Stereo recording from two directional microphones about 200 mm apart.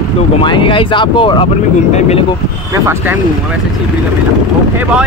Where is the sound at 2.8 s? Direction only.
10° right (ahead or behind).